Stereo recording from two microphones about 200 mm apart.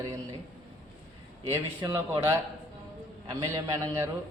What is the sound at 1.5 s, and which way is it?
A man's voice, 15° right (ahead or behind).